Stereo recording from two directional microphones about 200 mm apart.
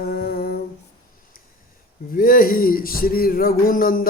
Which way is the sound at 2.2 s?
45° left (ahead or behind).